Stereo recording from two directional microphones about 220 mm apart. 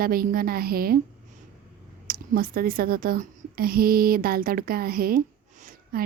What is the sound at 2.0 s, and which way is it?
A woman's voice, 40° right (ahead or behind).